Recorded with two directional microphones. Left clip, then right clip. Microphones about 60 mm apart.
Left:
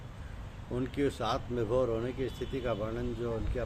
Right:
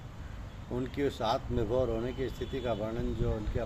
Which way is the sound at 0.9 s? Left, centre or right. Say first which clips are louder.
Right 1 dB; left.